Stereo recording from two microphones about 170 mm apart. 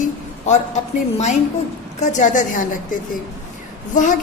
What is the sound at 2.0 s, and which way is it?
Speech, 45° left (ahead or behind).